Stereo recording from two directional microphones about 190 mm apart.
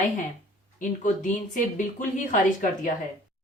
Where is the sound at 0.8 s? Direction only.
40° left (ahead or behind).